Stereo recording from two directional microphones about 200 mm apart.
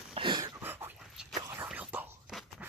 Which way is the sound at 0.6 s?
10° right (ahead or behind).